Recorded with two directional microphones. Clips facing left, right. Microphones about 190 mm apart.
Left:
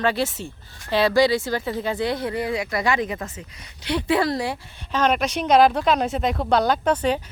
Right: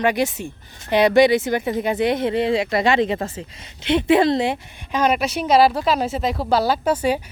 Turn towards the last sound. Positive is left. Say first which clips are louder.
# right 1 dB
turn(degrees=-10)  # may be behind; listen again after turning